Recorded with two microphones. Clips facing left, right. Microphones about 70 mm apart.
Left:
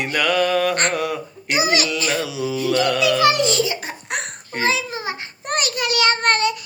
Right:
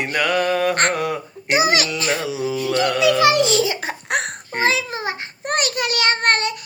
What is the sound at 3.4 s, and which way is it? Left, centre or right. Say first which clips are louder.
Giggle: right 2 dB; right.